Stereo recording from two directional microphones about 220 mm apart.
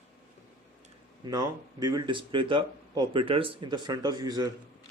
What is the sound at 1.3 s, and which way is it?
Speech, 15° right (ahead or behind).